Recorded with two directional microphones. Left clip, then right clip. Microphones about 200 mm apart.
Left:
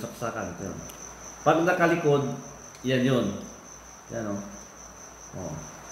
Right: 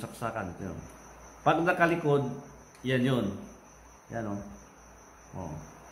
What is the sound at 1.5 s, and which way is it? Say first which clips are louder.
Speech: left 3 dB; 30° right (ahead or behind).